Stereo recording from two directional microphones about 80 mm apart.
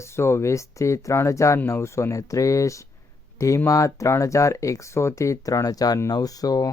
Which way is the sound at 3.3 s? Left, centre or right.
Left.